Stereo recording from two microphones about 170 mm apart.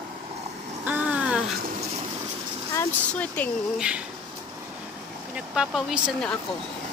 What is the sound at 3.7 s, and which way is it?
Speech, 5° right (ahead or behind).